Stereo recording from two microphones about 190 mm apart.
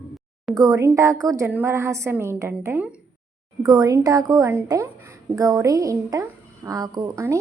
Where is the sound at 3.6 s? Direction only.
20° right (ahead or behind).